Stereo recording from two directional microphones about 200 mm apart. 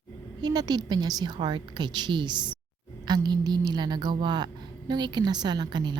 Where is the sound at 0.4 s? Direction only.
20° right (ahead or behind).